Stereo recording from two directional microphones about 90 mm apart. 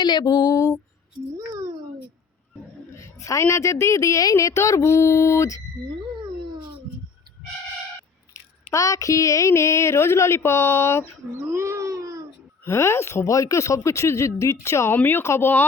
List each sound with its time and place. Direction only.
0.0 s music: 55° left (ahead or behind)
1.4 s a sound: 40° right (ahead or behind)
3.0 s a woman's voice: 35° left (ahead or behind)
8.7 s a woman's voice: 35° left (ahead or behind)
11.4 s baby cry: 30° right (ahead or behind)
12.6 s a woman's voice: 30° left (ahead or behind)